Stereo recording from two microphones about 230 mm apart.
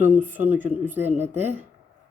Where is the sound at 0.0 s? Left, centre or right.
Centre.